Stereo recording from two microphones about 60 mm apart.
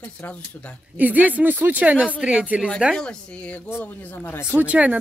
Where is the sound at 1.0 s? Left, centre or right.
Right.